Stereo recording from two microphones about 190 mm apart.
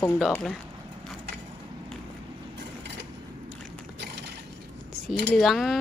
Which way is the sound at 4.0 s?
60° right (ahead or behind).